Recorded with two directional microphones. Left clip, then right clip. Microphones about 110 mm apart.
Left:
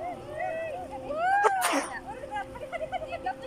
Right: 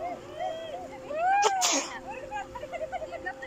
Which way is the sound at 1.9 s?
5° left (ahead or behind).